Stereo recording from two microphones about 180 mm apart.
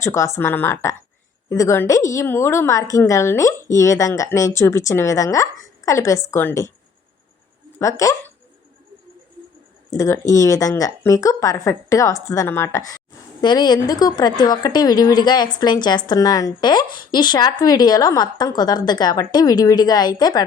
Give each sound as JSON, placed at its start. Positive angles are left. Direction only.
{"t": 0.0, "sound": "a woman's voice", "side_deg": 15}
{"t": 7.8, "sound": "a woman's voice", "side_deg": 15}
{"t": 9.9, "sound": "a woman's voice", "side_deg": 15}